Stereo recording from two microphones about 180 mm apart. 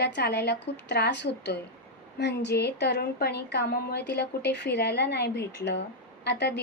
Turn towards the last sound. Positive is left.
turn(degrees=70)  # may be behind; listen again after turning